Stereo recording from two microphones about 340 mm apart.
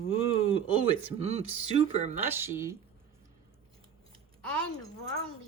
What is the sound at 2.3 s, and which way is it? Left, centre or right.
Speech, centre.